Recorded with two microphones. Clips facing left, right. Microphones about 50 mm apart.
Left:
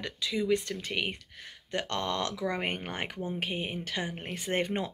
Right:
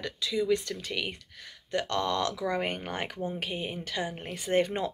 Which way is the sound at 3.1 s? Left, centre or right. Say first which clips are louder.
Right 1 dB; right.